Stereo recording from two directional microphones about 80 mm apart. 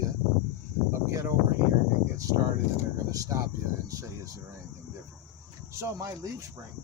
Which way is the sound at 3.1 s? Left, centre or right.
Right.